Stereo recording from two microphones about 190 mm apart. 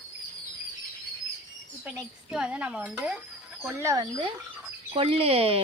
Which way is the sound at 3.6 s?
15° right (ahead or behind).